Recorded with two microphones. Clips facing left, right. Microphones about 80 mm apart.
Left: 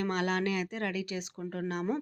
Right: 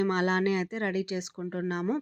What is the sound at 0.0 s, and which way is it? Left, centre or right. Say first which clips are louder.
Speech: right 4 dB; right.